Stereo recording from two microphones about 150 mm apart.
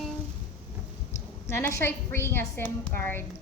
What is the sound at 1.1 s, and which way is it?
A woman's voice, 15° left (ahead or behind).